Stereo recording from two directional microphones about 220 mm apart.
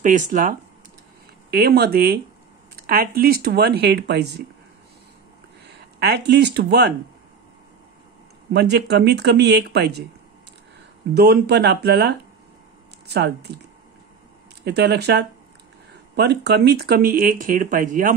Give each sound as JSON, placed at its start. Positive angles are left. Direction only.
{"t": 0.0, "sound": "speech", "side_deg": -35}
{"t": 5.9, "sound": "speech", "side_deg": -50}
{"t": 8.5, "sound": "speech", "side_deg": -50}
{"t": 11.1, "sound": "speech", "side_deg": -45}
{"t": 14.6, "sound": "speech", "side_deg": -50}